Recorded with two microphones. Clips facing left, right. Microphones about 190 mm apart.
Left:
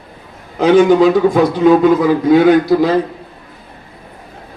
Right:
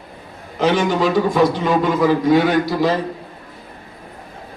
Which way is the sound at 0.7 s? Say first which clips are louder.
Left 10 dB; 55° left (ahead or behind).